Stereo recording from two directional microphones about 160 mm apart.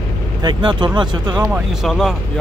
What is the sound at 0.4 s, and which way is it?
Speech, 30° right (ahead or behind).